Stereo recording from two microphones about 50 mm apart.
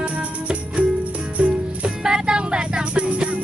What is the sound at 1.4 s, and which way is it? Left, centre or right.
Music, right.